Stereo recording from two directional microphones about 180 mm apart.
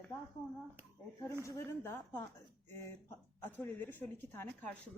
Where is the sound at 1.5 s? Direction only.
15° left (ahead or behind).